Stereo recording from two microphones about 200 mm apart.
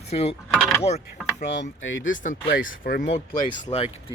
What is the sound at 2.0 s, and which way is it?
Speech, 40° left (ahead or behind).